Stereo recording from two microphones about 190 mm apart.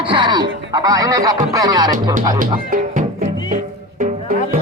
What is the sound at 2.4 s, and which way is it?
Speech, 45° right (ahead or behind).